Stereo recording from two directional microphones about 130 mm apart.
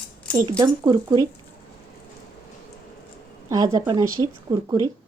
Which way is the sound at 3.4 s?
25° right (ahead or behind).